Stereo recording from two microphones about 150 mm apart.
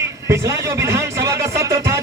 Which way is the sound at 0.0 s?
20° right (ahead or behind).